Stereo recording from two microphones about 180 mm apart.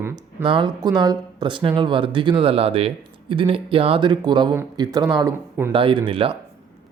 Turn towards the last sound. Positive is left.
turn(degrees=-30)  # may be behind; listen again after turning